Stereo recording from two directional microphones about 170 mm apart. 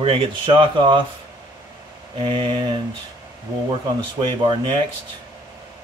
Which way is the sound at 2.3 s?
30° right (ahead or behind).